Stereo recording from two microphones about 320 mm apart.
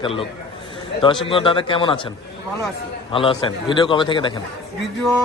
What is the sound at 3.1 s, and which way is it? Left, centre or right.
A man's voice, centre.